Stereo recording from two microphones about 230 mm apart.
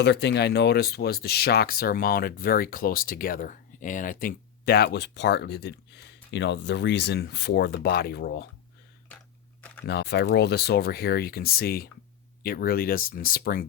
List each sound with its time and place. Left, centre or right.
0.0 s speech: left
9.8 s speech: left